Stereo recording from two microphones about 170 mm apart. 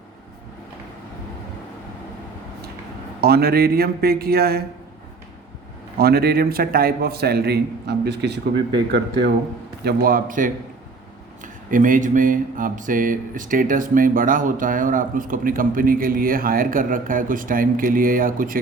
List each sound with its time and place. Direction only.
3.2 s speech: 65° right (ahead or behind)
6.0 s a man's voice: 65° right (ahead or behind)
9.8 s speech: 55° right (ahead or behind)
11.7 s speech: 50° right (ahead or behind)